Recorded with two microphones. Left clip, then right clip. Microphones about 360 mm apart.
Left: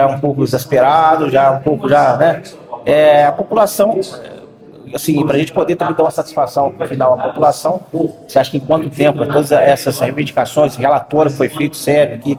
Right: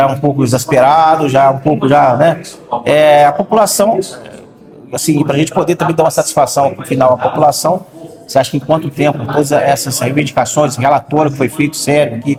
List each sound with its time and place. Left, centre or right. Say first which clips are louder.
0.0 s speech: right 1 dB; right
4.9 s speech: right 1 dB; right